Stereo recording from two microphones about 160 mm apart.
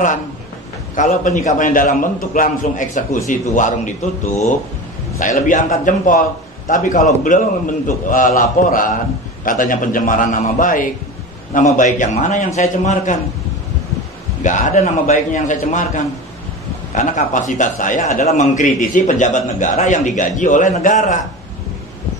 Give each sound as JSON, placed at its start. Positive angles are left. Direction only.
{"t": 0.9, "sound": "a man's voice", "side_deg": 50}
{"t": 5.2, "sound": "a man's voice", "side_deg": 55}
{"t": 14.4, "sound": "a man's voice", "side_deg": 50}